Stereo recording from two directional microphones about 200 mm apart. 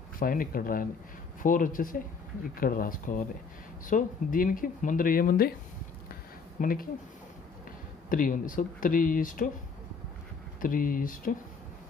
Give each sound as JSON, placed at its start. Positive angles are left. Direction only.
{"t": 0.2, "sound": "speech", "side_deg": 45}
{"t": 6.6, "sound": "speech", "side_deg": 45}
{"t": 8.1, "sound": "speech", "side_deg": 45}
{"t": 10.6, "sound": "speech", "side_deg": 45}